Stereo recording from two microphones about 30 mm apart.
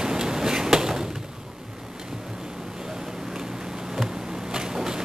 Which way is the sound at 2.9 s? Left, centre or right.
Centre.